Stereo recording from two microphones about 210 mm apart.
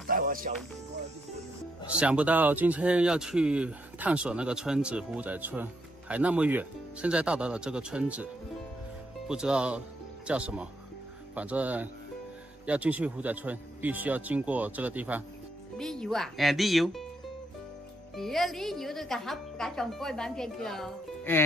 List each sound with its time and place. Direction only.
0.0 s music: 40° right (ahead or behind)
2.0 s speech: 5° right (ahead or behind)
9.3 s speech: 5° right (ahead or behind)
18.1 s speech: centre (ahead or behind)